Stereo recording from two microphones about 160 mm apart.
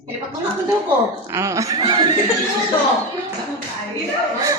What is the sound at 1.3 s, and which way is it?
Speech, 20° right (ahead or behind).